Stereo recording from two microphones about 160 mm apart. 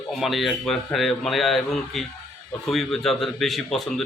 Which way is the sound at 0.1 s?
Centre (ahead or behind).